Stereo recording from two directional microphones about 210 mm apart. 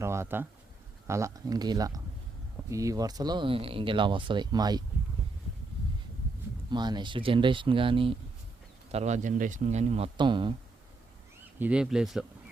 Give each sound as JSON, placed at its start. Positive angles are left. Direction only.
{"t": 0.0, "sound": "speech", "side_deg": -15}
{"t": 6.7, "sound": "speech", "side_deg": -20}
{"t": 11.6, "sound": "speech", "side_deg": -5}